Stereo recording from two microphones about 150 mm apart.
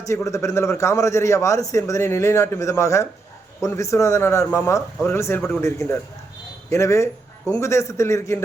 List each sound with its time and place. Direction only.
0.0 s a man's voice: 20° left (ahead or behind)